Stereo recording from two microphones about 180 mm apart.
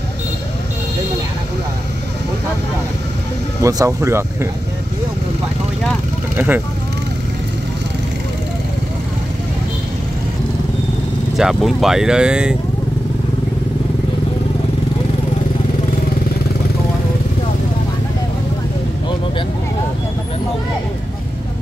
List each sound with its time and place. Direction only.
3.6 s speech: 15° right (ahead or behind)
6.3 s vehicle: 10° right (ahead or behind)
11.3 s speech: centre (ahead or behind)